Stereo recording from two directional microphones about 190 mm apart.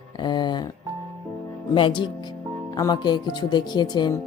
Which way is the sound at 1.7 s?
25° left (ahead or behind).